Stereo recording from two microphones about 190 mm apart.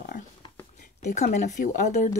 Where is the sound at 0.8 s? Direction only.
40° left (ahead or behind).